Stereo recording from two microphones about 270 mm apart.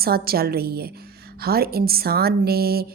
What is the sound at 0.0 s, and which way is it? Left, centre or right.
A woman's voice, right.